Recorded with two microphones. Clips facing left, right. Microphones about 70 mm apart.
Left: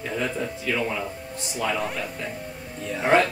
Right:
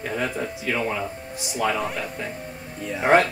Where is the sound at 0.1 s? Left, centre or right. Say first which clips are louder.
Even; right.